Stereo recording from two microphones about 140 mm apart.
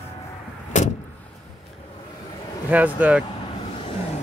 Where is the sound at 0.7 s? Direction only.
60° left (ahead or behind).